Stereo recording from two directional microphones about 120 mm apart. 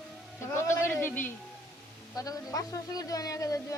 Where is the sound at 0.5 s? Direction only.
20° left (ahead or behind).